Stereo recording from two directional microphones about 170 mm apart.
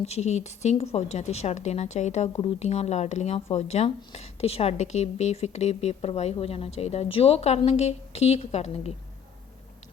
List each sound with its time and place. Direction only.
0.0 s speech: 40° left (ahead or behind)